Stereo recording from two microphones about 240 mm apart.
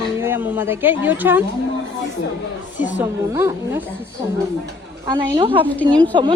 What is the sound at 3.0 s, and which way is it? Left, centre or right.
Speech, centre.